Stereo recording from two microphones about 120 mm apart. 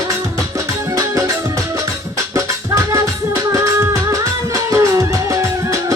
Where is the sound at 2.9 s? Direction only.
30° right (ahead or behind).